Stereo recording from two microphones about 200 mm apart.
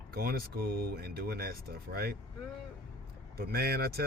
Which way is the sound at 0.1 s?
50° right (ahead or behind).